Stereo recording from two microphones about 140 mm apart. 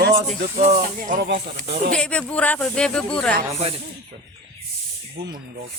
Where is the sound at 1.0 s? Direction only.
80° right.